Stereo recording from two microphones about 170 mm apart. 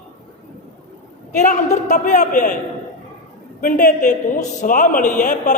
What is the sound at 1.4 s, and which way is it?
A woman's voice, 45° left (ahead or behind).